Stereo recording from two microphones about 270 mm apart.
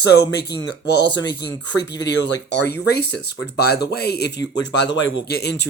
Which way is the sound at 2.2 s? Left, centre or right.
Left.